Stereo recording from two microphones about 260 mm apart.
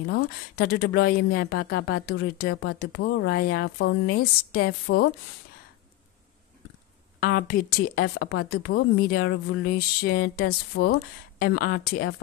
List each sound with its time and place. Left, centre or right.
0.0 s a woman's voice: left
7.2 s a woman's voice: left